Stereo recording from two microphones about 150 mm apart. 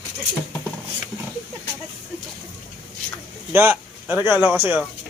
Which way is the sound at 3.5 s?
15° right (ahead or behind).